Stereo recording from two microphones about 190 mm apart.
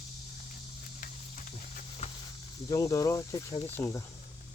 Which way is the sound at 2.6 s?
20° left (ahead or behind).